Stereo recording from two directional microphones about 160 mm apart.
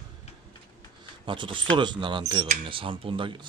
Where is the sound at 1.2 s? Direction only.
30° right (ahead or behind).